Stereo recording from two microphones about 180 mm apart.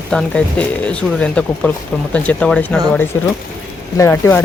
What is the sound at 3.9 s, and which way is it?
Speech, 15° left (ahead or behind).